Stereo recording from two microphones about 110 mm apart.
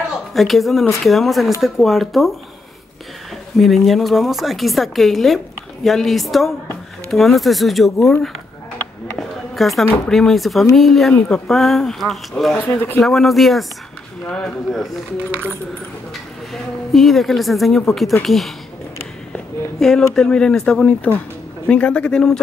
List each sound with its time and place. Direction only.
0.3 s speech: centre (ahead or behind)
3.5 s speech: centre (ahead or behind)
9.6 s speech: centre (ahead or behind)
12.5 s speech: 20° left (ahead or behind)
13.0 s speech: centre (ahead or behind)
16.9 s speech: centre (ahead or behind)
19.8 s speech: 5° left (ahead or behind)